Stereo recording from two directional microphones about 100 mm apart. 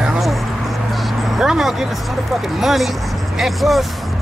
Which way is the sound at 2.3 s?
Centre (ahead or behind).